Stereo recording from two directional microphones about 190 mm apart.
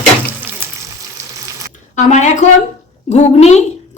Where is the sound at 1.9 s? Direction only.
40° left (ahead or behind).